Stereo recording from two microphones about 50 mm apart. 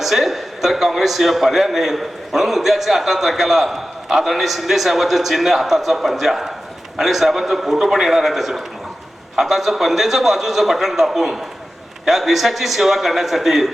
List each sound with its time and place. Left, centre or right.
0.0 s a man's voice: centre